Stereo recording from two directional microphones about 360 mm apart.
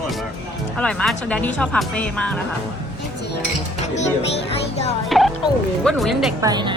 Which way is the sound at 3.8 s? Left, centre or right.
Centre.